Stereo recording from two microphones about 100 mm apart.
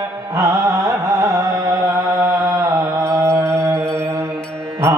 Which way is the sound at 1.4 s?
35° right (ahead or behind).